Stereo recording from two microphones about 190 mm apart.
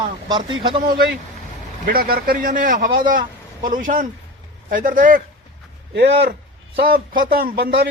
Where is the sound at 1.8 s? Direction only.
50° right (ahead or behind).